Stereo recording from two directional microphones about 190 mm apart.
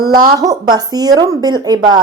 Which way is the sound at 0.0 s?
20° right (ahead or behind).